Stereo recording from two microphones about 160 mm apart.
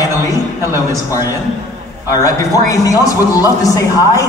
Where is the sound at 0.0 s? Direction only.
20° left (ahead or behind).